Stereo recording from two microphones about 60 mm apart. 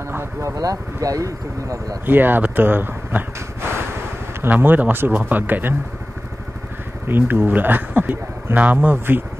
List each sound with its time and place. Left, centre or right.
0.6 s speech: right
2.0 s speech: right
4.5 s speech: right
7.1 s speech: right